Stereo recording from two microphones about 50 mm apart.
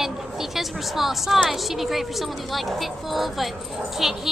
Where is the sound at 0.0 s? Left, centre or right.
Centre.